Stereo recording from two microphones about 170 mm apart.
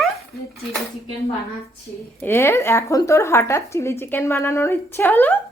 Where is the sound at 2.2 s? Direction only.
15° left (ahead or behind).